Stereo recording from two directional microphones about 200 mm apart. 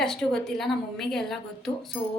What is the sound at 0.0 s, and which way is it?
A woman's voice, centre (ahead or behind).